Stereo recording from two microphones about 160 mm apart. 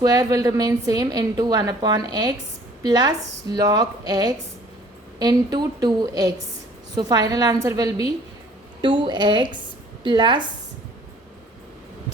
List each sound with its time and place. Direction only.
0.0 s a woman's voice: 25° right (ahead or behind)